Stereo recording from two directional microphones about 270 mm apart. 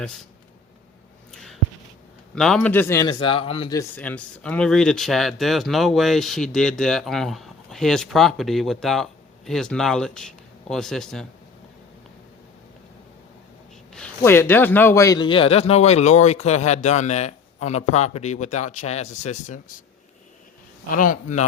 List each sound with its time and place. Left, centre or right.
1.3 s a sound: centre
2.3 s a man's voice: centre
13.9 s a man's voice: centre; by 19.8 s left
20.9 s a man's voice: left